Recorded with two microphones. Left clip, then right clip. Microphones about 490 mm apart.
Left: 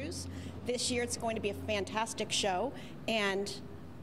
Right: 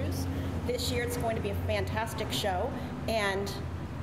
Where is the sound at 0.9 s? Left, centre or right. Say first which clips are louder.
Right 3 dB; left.